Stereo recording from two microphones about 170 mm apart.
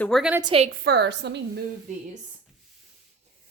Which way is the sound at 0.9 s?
80° right.